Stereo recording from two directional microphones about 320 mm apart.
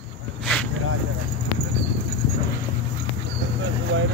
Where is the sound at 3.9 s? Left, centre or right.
Right.